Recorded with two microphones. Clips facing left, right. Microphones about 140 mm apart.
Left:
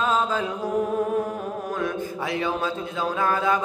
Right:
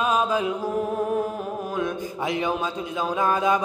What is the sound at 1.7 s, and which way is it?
A man's voice, 15° right (ahead or behind).